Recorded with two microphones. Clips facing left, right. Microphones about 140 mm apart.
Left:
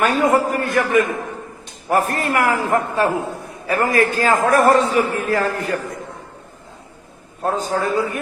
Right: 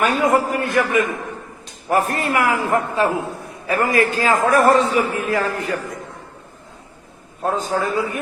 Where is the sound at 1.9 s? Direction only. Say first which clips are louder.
Even; 45° left (ahead or behind).